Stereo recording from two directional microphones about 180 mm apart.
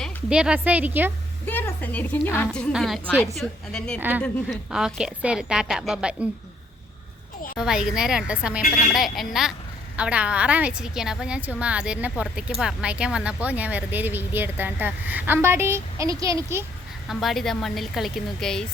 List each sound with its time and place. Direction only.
0.0 s speech: 5° right (ahead or behind)
1.5 s a woman's voice: 10° left (ahead or behind)
7.6 s speech: 5° right (ahead or behind)
8.6 s speech: 50° left (ahead or behind)
8.9 s speech: centre (ahead or behind)
17.1 s speech: centre (ahead or behind)